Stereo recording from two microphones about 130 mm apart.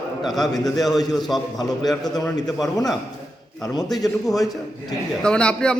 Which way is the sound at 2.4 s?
Centre (ahead or behind).